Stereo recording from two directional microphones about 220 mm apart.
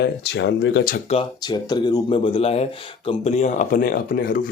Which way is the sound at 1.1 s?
20° left (ahead or behind).